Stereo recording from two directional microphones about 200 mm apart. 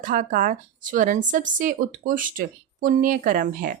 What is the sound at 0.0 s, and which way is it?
Speech, 40° right (ahead or behind).